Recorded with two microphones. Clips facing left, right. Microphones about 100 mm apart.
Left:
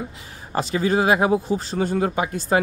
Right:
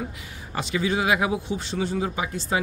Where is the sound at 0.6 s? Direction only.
40° left (ahead or behind).